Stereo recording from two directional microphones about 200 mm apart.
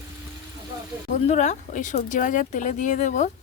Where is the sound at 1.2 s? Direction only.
35° left (ahead or behind).